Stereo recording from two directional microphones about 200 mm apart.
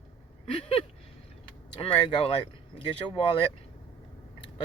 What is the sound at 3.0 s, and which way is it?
Speech, 25° left (ahead or behind).